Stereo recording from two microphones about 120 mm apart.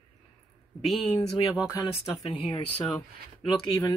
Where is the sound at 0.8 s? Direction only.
Centre (ahead or behind).